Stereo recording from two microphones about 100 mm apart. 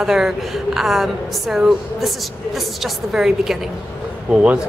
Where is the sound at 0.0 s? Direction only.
5° right (ahead or behind).